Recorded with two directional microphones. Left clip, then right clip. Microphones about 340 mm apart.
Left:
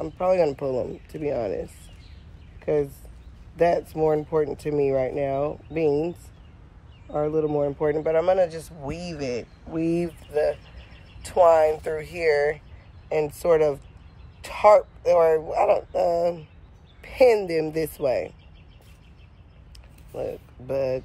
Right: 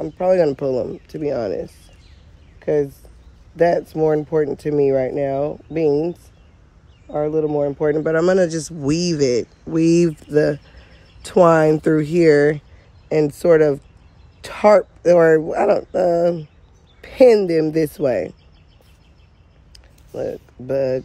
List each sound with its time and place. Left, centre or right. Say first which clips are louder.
0.0 s speech: right 5 dB; right
20.2 s speech: right 5 dB; right